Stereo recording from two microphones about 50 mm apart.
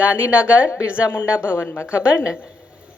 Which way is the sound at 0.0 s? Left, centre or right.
Right.